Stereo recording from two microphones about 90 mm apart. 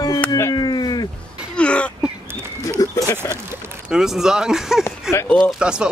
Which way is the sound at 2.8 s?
45° left (ahead or behind).